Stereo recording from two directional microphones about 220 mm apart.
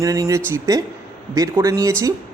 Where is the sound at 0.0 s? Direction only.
15° right (ahead or behind).